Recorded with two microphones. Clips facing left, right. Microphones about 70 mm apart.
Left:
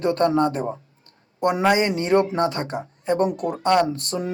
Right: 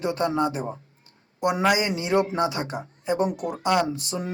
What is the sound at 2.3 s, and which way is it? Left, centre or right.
Speech, centre.